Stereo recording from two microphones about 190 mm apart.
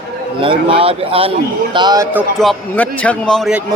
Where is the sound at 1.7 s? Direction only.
20° right (ahead or behind).